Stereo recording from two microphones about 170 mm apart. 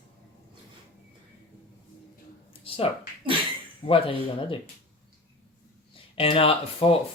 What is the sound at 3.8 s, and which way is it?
Speech, 30° left (ahead or behind).